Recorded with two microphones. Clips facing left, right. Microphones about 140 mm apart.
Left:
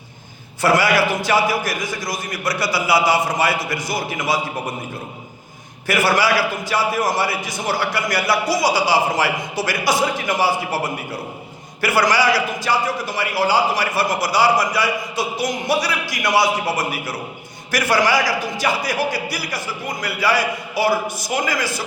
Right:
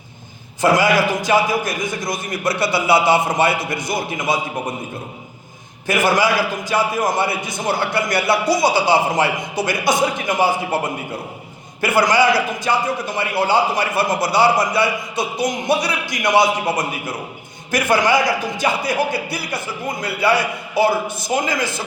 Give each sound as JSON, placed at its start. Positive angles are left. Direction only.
{"t": 0.6, "sound": "a man's voice", "side_deg": -20}
{"t": 5.9, "sound": "a man's voice", "side_deg": -20}
{"t": 11.8, "sound": "a man's voice", "side_deg": -20}